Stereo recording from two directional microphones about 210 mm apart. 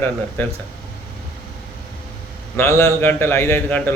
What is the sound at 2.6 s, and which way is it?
A man's voice, 10° left (ahead or behind).